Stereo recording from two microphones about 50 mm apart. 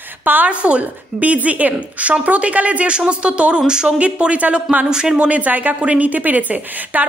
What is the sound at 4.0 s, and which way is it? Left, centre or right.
A woman's voice, right.